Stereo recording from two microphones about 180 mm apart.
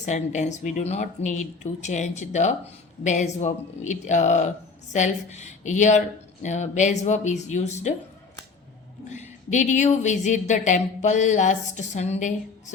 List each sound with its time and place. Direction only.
0.0 s speech: 40° left (ahead or behind)
9.0 s speech: 40° left (ahead or behind)